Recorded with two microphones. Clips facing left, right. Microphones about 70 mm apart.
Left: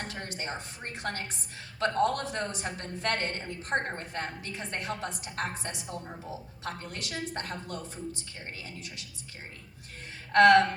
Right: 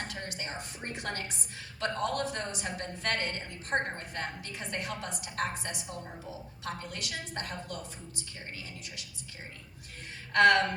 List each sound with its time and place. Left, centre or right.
0.0 s a woman's voice: left
10.3 s a woman's voice: left